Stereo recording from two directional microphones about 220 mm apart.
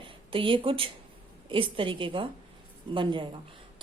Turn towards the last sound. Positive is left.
turn(degrees=-20)  # may be behind; listen again after turning